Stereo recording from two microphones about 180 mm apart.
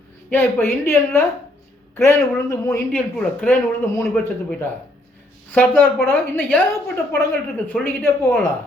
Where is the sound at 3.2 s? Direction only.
5° left (ahead or behind).